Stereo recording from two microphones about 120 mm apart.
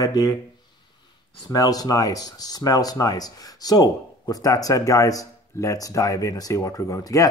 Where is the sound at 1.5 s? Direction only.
30° left (ahead or behind).